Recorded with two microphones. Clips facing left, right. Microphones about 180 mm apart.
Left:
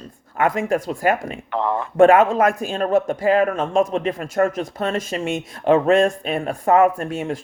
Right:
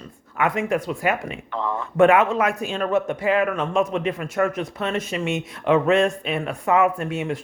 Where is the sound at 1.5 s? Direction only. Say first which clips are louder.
Left 5 dB; 65° left (ahead or behind).